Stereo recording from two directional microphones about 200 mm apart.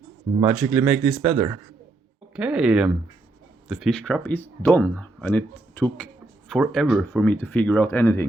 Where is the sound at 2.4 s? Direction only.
5° right (ahead or behind).